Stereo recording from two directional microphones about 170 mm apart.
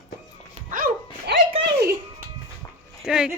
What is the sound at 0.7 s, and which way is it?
Music, 55° right (ahead or behind).